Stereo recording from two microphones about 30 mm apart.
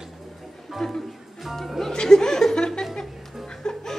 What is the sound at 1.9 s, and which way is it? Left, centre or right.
Chuckle, left.